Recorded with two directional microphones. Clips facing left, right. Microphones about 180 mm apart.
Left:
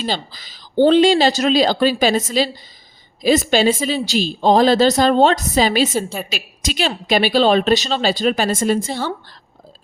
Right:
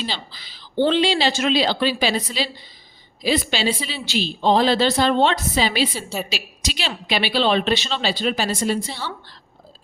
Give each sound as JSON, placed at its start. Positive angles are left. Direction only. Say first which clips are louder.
{"t": 0.0, "sound": "a woman's voice", "louder": "left 6 dB", "side_deg": 45}